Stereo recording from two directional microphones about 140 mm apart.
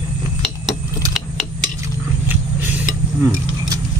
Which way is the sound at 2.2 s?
15° right (ahead or behind).